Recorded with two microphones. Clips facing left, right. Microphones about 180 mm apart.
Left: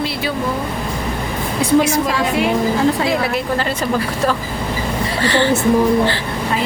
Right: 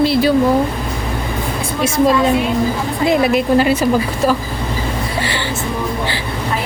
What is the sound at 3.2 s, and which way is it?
Speech, 20° right (ahead or behind).